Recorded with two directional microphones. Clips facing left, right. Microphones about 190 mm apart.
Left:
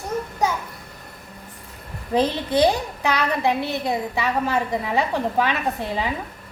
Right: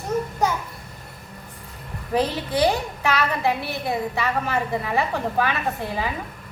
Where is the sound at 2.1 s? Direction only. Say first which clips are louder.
Left 2 dB; 20° left (ahead or behind).